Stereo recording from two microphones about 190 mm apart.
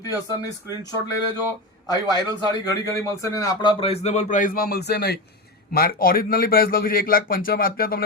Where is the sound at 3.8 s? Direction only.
35° left (ahead or behind); by 8.0 s 50° left (ahead or behind).